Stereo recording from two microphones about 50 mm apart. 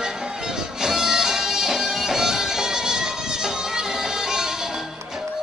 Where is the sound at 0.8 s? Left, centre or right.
Centre.